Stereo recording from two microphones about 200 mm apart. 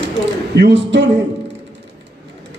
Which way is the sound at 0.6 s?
60° right (ahead or behind).